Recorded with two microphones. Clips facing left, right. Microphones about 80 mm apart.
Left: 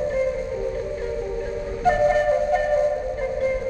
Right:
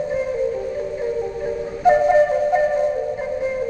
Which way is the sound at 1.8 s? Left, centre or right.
Centre.